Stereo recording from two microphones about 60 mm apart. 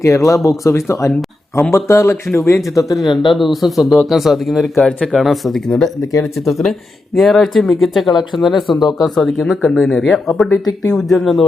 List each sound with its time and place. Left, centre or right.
0.0 s speech: left
3.0 s speech: centre